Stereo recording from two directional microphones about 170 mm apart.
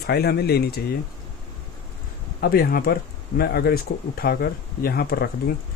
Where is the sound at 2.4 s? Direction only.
65° left (ahead or behind).